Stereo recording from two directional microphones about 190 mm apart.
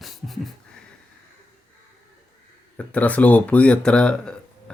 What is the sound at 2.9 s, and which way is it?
Speech, 5° left (ahead or behind).